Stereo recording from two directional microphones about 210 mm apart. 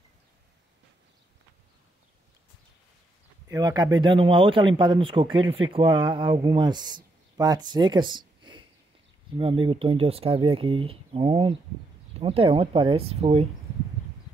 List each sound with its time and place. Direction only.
3.4 s speech: 20° right (ahead or behind)